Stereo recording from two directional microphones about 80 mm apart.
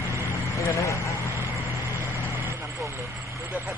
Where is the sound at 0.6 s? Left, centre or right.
Left.